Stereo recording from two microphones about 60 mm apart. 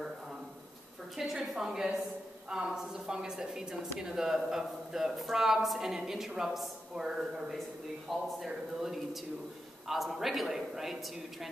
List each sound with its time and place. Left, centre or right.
1.1 s a woman's voice: centre